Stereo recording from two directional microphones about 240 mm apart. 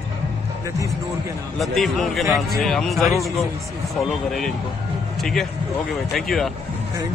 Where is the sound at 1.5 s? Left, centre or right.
Centre.